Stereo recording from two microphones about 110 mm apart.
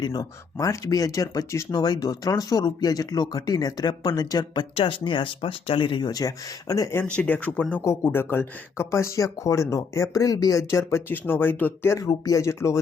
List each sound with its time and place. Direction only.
0.0 s speech: 35° left (ahead or behind)
4.7 s speech: 55° left (ahead or behind); by 12.8 s 25° left (ahead or behind)